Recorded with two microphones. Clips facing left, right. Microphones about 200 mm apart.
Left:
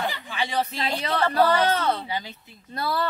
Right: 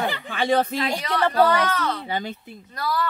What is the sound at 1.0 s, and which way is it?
Speech, 30° left (ahead or behind).